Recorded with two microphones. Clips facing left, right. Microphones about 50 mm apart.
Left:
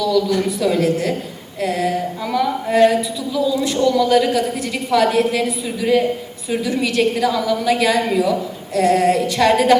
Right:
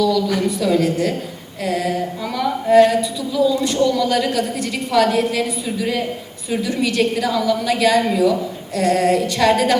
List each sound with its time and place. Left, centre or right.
0.4 s a woman's voice: centre
1.6 s a sound: centre
1.9 s a woman's voice: centre